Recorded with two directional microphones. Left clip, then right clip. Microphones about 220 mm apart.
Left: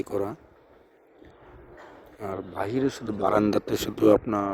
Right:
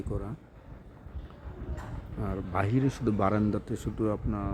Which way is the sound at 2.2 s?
25° left (ahead or behind).